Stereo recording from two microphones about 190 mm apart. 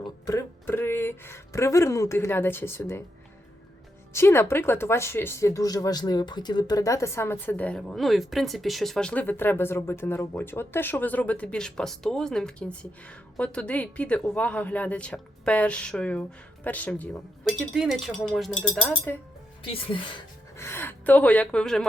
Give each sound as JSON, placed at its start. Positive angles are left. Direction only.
{"t": 0.0, "sound": "a sound", "side_deg": 15}
{"t": 4.1, "sound": "speech", "side_deg": 15}
{"t": 19.6, "sound": "speech", "side_deg": 30}
{"t": 20.6, "sound": "speech", "side_deg": 10}